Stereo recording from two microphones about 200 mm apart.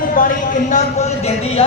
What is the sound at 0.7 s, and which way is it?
Speech, 35° left (ahead or behind).